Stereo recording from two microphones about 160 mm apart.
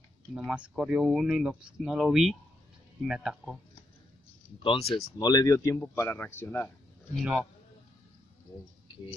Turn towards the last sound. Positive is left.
turn(degrees=-5)  # may be behind; listen again after turning